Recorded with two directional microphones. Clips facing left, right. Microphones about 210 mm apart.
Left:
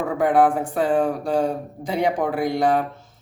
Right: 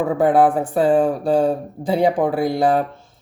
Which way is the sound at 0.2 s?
30° right (ahead or behind).